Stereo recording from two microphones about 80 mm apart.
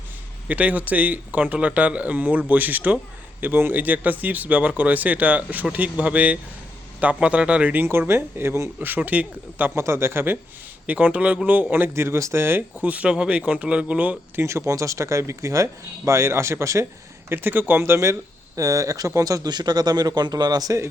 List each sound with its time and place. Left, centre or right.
0.4 s speech: centre; by 8.7 s right
8.8 s speech: right
10.8 s speech: centre
14.4 s speech: right
17.2 s speech: right